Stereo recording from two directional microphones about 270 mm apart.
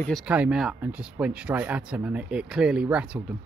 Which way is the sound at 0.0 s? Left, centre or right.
Centre.